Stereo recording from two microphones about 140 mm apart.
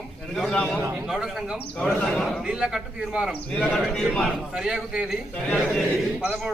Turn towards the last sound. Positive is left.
turn(degrees=0)  # may be behind; listen again after turning